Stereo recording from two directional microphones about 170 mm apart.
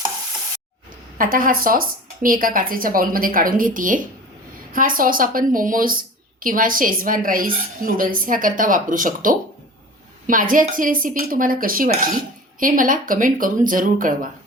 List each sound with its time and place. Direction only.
1.2 s a woman's voice: 55° right (ahead or behind)